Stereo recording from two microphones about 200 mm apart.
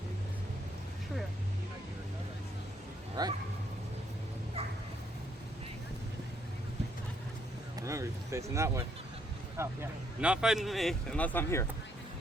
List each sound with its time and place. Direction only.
3.2 s speech: 20° right (ahead or behind)
7.8 s speech: 15° right (ahead or behind); by 11.6 s 10° left (ahead or behind)